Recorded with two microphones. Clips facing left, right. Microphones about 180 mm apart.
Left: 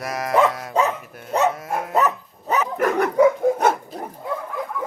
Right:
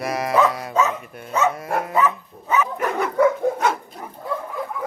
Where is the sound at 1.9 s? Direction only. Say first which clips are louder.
Left 3 dB; 40° left (ahead or behind).